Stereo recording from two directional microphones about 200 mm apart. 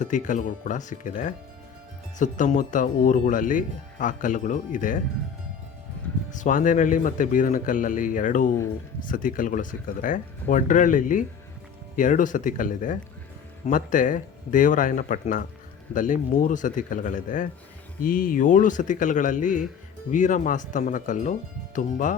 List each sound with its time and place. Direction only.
0.0 s speech: 40° left (ahead or behind)
6.3 s speech: 40° left (ahead or behind)